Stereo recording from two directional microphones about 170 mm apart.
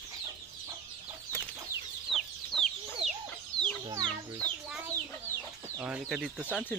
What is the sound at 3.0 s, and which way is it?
Chicken, 35° right (ahead or behind).